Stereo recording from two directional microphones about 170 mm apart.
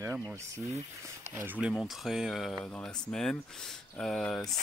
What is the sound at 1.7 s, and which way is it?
Speech, centre (ahead or behind).